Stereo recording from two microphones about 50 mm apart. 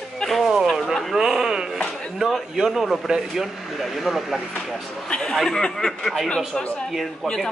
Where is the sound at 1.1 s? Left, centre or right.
Centre.